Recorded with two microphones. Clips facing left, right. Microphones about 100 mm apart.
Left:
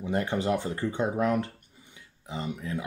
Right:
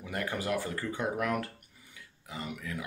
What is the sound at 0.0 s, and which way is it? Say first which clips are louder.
Speech: left 7 dB; 25° left (ahead or behind).